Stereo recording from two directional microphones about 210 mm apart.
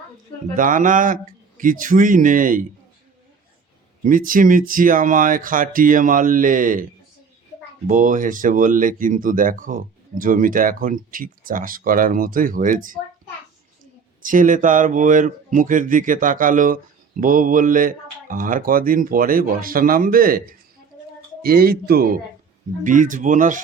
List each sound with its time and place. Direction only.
0.5 s a man's voice: 40° right (ahead or behind)
4.0 s a man's voice: 40° right (ahead or behind)
7.9 s a man's voice: 40° right (ahead or behind)
14.2 s a man's voice: 40° right (ahead or behind)